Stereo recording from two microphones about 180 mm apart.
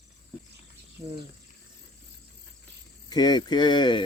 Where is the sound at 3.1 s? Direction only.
20° left (ahead or behind).